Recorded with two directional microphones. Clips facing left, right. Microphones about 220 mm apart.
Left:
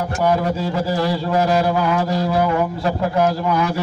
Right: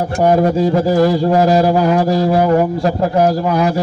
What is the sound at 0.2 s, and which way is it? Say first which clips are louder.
A man's voice: right 7 dB; 45° right (ahead or behind).